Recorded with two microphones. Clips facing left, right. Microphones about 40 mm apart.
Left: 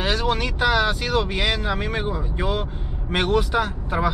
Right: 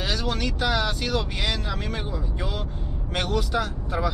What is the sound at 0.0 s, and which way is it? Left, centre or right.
Speech, left.